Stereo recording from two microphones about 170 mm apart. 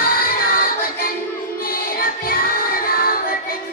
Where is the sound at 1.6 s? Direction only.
60° left (ahead or behind).